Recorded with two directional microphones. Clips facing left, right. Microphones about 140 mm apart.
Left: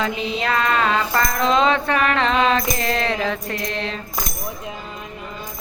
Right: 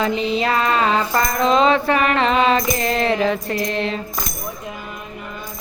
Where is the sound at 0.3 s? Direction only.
5° right (ahead or behind).